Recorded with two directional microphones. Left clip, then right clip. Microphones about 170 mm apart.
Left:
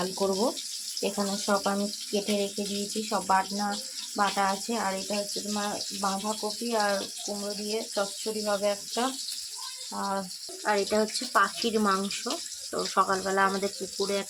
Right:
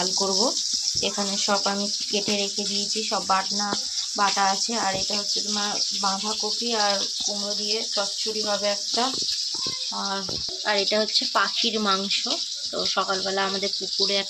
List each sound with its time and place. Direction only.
0.0 s speech: centre (ahead or behind)
8.4 s speech: 5° left (ahead or behind)
10.7 s speech: 5° left (ahead or behind)
13.0 s speech: 15° left (ahead or behind)